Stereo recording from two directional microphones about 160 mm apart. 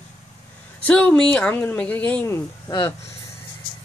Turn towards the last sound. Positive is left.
turn(degrees=15)  # may be behind; listen again after turning